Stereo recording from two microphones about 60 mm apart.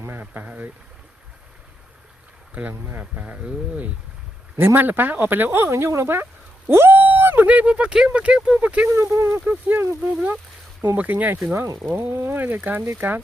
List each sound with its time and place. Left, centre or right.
0.2 s speech: right
2.6 s speech: right
4.5 s speech: right
9.0 s speech: right
9.5 s speech: right